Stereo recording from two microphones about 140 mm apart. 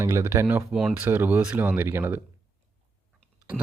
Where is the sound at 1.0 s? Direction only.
15° right (ahead or behind).